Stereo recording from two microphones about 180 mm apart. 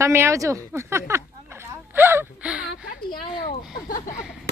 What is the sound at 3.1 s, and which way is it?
Speech, 50° left (ahead or behind).